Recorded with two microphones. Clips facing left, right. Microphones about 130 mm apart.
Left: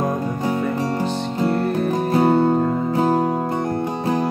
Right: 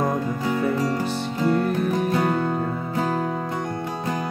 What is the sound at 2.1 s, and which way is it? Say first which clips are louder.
Music: left 7 dB; 35° left (ahead or behind).